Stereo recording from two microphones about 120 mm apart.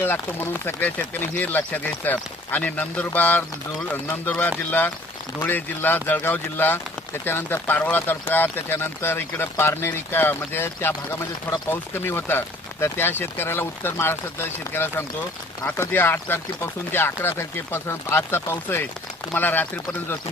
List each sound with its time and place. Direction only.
0.0 s speech: 20° left (ahead or behind)